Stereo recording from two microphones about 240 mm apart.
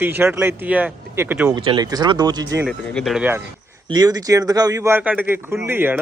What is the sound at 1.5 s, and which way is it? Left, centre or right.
Speech, centre.